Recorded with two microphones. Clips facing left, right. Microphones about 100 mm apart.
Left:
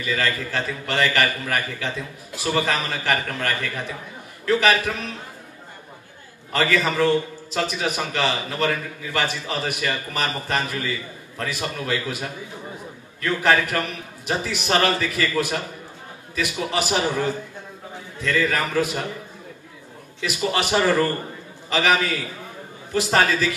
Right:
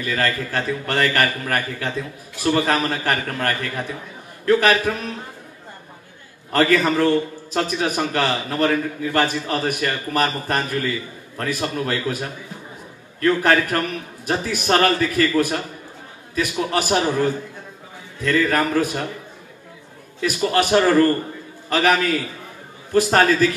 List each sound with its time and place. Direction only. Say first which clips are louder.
0.0 s a man's voice: right 2 dB; 40° right (ahead or behind)
6.5 s a man's voice: right 4 dB; 40° right (ahead or behind)
13.2 s a man's voice: right 3 dB; 40° right (ahead or behind)
18.2 s a man's voice: right 4 dB; 45° right (ahead or behind)
20.2 s a man's voice: right 4 dB; 45° right (ahead or behind)